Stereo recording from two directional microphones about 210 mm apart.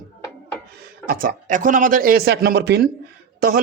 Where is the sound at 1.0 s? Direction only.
40° right (ahead or behind).